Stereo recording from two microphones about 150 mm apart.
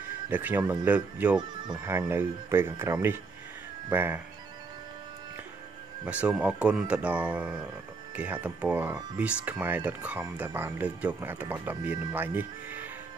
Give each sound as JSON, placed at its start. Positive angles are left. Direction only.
{"t": 0.3, "sound": "speech", "side_deg": -10}
{"t": 6.0, "sound": "speech", "side_deg": -10}